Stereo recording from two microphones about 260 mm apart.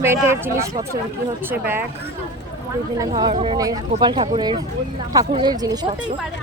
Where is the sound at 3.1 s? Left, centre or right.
Right.